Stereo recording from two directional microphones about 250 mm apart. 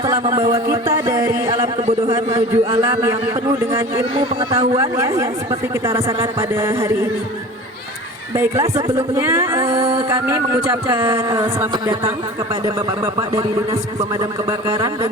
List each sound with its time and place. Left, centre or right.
0.0 s speech: centre
8.4 s speech: centre
9.7 s music: right
10.1 s speech: centre
13.1 s speech: centre